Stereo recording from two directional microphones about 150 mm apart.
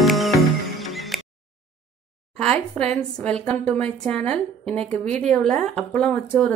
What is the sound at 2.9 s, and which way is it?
A woman's voice, 5° left (ahead or behind).